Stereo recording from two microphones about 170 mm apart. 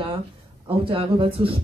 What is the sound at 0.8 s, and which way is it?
Speech, 30° right (ahead or behind).